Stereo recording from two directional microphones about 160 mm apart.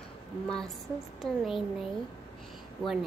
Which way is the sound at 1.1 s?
Centre (ahead or behind).